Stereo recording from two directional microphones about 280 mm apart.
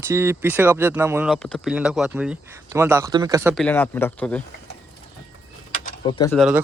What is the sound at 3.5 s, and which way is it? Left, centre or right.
Speech, centre.